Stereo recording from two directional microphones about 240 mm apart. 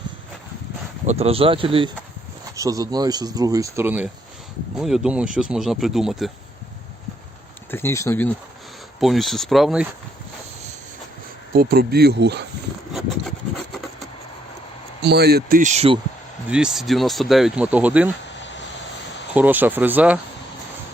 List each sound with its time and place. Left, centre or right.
1.0 s speech: right; by 6.3 s centre
7.7 s speech: centre
9.0 s speech: centre
11.5 s speech: right
12.9 s wood: centre
15.0 s speech: right
16.5 s speech: centre
19.3 s speech: centre